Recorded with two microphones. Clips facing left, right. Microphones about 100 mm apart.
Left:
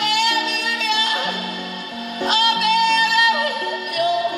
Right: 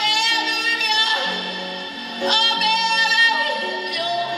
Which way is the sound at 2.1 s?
50° left (ahead or behind).